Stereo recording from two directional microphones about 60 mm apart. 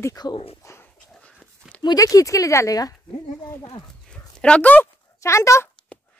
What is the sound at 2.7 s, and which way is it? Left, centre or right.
Speech, left.